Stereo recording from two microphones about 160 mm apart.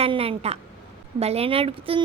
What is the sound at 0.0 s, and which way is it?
A woman's voice, 35° right (ahead or behind).